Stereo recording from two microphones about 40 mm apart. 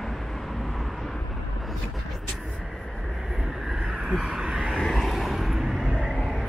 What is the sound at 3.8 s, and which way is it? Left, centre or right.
Vehicle, right.